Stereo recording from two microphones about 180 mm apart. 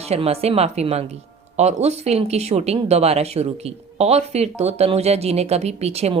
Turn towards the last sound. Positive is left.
turn(degrees=-35)  # may be behind; listen again after turning